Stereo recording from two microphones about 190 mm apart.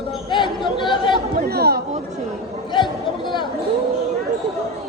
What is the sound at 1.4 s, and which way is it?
Chatter, 55° right (ahead or behind).